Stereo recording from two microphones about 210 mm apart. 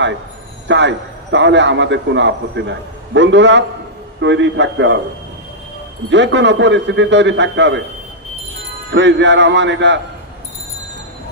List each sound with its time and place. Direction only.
0.7 s a man's voice: 60° right (ahead or behind)
6.0 s a man's voice: 60° right (ahead or behind)
8.9 s a man's voice: 60° right (ahead or behind)